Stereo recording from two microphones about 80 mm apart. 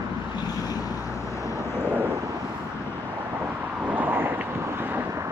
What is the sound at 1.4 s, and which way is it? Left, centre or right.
Vehicle, left.